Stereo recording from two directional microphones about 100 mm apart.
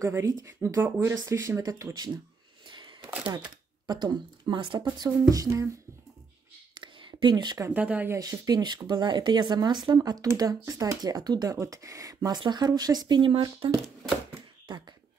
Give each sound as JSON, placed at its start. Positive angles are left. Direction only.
{"t": 0.0, "sound": "speech", "side_deg": -30}
{"t": 2.6, "sound": "a sound", "side_deg": -50}
{"t": 3.8, "sound": "speech", "side_deg": -45}
{"t": 6.7, "sound": "a sound", "side_deg": -55}
{"t": 7.7, "sound": "speech", "side_deg": -15}
{"t": 8.1, "sound": "speech", "side_deg": -35}
{"t": 9.9, "sound": "speech", "side_deg": -35}